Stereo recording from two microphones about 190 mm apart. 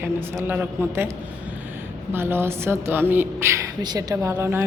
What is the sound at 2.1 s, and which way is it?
A woman's voice, 10° right (ahead or behind).